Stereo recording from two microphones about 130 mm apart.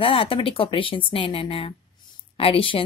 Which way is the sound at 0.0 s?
45° left (ahead or behind).